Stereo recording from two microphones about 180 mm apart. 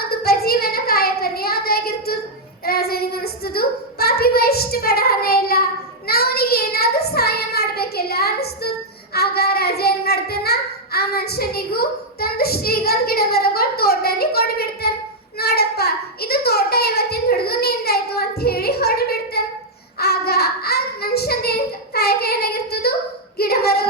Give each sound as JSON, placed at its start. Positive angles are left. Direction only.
{"t": 0.0, "sound": "child singing", "side_deg": 60}
{"t": 9.1, "sound": "a sound", "side_deg": 60}
{"t": 20.0, "sound": "child singing", "side_deg": 60}